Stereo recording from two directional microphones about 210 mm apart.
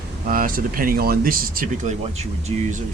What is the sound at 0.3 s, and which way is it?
Speech, 45° right (ahead or behind).